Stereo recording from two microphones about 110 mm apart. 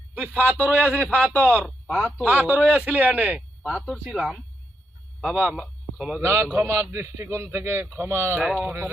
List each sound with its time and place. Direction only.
0.1 s a man's voice: 15° right (ahead or behind)
1.0 s a man's voice: 10° left (ahead or behind)
1.6 s a man's voice: 5° right (ahead or behind)
6.2 s a man's voice: 20° right (ahead or behind)
8.4 s speech: centre (ahead or behind)
8.6 s a man's voice: 20° right (ahead or behind)